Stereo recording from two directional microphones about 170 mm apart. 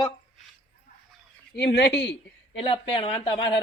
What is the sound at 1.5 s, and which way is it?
Speech, 85° left.